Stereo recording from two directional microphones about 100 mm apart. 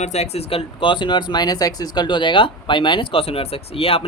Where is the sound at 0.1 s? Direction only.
90° left.